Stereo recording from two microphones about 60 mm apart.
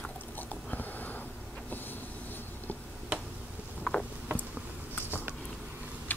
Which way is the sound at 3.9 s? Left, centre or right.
Centre.